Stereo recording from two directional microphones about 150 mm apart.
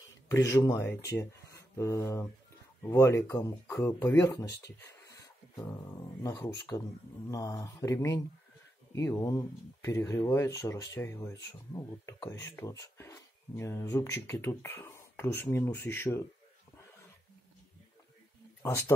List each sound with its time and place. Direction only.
0.3 s speech: 20° left (ahead or behind)
1.4 s a sound: 20° left (ahead or behind)
2.8 s speech: 20° left (ahead or behind)
18.6 s speech: 20° left (ahead or behind)